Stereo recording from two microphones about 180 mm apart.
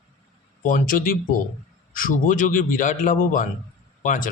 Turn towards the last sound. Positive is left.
turn(degrees=45)  # may be behind; listen again after turning